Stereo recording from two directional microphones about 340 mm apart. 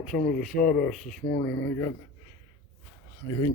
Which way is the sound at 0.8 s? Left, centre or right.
Centre.